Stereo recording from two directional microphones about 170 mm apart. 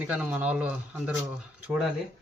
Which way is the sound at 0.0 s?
5° right (ahead or behind).